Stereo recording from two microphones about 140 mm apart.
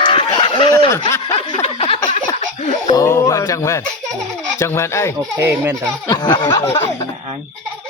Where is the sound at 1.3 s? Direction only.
50° left (ahead or behind).